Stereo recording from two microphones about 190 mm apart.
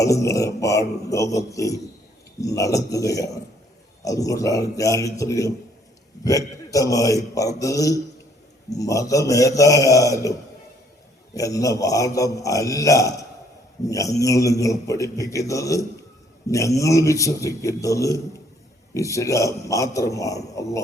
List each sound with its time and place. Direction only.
0.0 s a man's voice: 15° left (ahead or behind)
11.3 s a man's voice: 15° left (ahead or behind)